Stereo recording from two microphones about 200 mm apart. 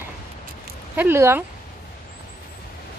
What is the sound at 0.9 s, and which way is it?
Speech, 10° right (ahead or behind).